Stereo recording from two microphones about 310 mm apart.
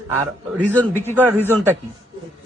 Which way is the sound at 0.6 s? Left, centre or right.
Centre.